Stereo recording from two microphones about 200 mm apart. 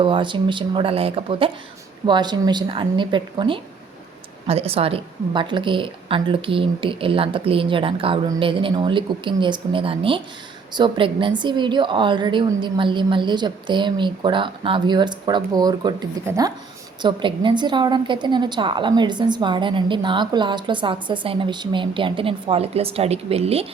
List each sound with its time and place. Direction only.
0.0 s a woman's voice: 25° right (ahead or behind)